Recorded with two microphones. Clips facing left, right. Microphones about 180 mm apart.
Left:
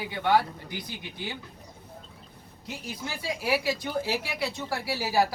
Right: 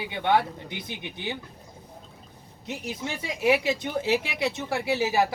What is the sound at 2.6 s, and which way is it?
A woman's voice, 20° right (ahead or behind).